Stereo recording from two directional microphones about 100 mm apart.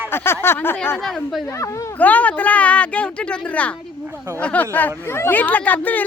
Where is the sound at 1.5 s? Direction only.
30° left (ahead or behind).